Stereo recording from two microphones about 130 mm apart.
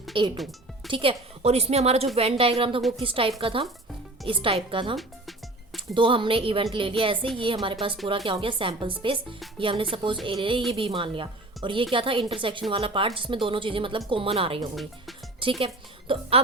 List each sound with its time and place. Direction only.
0.1 s a woman's voice: 40° right (ahead or behind)